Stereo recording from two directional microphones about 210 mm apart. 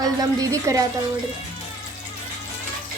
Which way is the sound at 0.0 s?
15° right (ahead or behind).